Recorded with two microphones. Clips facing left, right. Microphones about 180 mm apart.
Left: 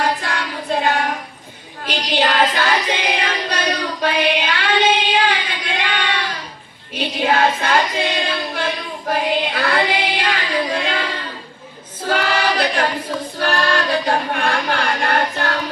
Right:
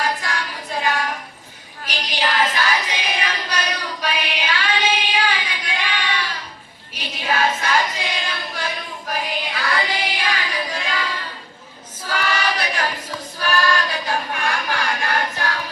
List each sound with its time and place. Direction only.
0.0 s child singing: 60° left (ahead or behind)
1.8 s music: 60° left (ahead or behind)
6.9 s choir: 60° left (ahead or behind)
13.4 s child singing: 60° left (ahead or behind)